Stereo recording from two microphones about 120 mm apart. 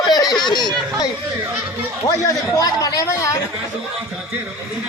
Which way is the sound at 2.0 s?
30° left (ahead or behind).